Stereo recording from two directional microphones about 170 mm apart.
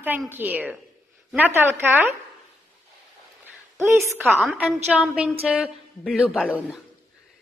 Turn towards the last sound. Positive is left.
turn(degrees=-5)  # may be behind; listen again after turning